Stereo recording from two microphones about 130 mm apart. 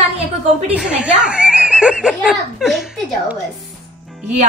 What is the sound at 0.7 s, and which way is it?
A woman's voice, 10° right (ahead or behind).